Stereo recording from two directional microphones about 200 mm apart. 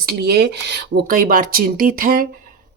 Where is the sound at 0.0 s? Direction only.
50° right (ahead or behind).